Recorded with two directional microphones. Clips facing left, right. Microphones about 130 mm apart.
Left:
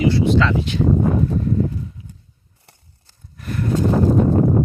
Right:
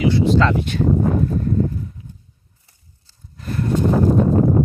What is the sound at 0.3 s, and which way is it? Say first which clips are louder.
Speech: right 1 dB; 50° right (ahead or behind).